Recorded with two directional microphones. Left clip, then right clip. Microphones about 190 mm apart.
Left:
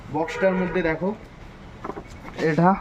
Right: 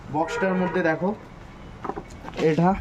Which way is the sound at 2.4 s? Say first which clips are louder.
Left 1 dB; 5° left (ahead or behind).